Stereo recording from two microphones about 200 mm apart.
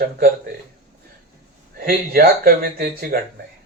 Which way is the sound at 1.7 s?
50° right (ahead or behind).